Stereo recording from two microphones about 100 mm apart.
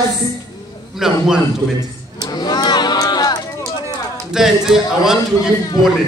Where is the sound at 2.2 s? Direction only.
45° left (ahead or behind).